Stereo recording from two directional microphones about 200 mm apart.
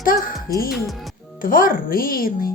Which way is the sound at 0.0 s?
45° left (ahead or behind).